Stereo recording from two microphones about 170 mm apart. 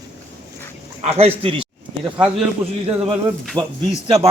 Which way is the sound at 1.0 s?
35° right (ahead or behind).